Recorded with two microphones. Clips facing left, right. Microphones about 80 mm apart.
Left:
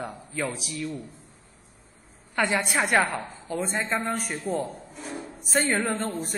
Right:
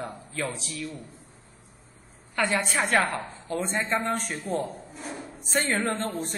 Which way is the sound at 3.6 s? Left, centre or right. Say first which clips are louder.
Even; centre.